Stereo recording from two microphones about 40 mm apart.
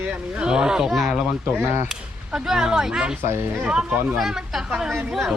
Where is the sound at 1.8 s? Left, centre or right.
Centre.